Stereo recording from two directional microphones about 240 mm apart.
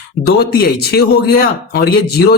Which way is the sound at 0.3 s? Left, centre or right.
Left.